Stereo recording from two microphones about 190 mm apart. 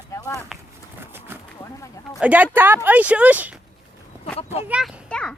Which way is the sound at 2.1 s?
5° right (ahead or behind).